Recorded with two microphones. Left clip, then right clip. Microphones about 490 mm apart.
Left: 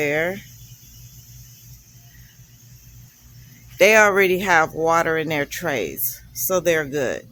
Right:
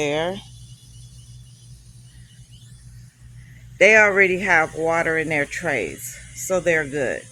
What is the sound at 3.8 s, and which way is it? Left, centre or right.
Speech, left.